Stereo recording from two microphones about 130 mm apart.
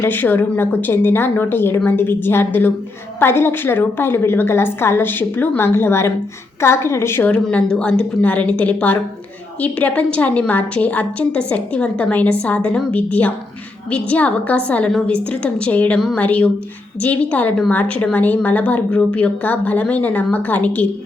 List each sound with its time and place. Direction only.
0.0 s a woman's voice: 15° left (ahead or behind)